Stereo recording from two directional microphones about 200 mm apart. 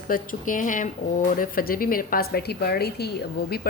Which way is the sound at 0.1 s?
40° left (ahead or behind).